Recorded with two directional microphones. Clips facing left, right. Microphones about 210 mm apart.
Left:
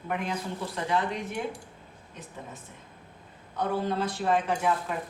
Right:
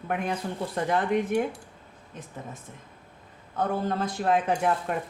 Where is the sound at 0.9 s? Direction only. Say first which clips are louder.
Right 4 dB; 55° right (ahead or behind).